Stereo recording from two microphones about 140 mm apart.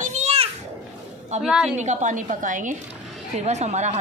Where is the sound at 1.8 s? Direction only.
65° right (ahead or behind).